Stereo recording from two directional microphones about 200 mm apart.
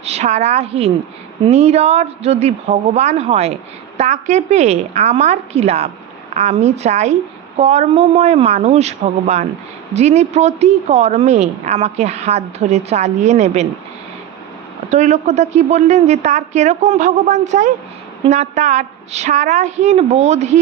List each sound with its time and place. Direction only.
0.0 s speech: 30° right (ahead or behind)
14.8 s speech: 35° right (ahead or behind)